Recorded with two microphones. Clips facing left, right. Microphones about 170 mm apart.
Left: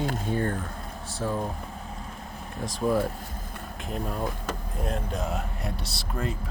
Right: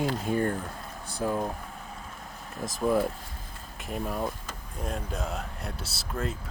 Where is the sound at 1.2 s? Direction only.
10° right (ahead or behind).